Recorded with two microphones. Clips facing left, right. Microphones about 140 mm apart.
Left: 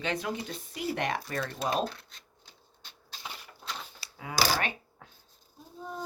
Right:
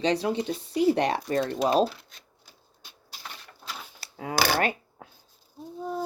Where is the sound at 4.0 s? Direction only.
40° right (ahead or behind).